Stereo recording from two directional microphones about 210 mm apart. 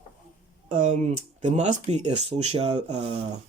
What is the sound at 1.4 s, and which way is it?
Speech, 35° right (ahead or behind).